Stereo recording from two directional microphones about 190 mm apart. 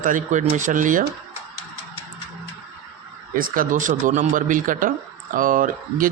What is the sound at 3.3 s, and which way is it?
Speech, 50° right (ahead or behind).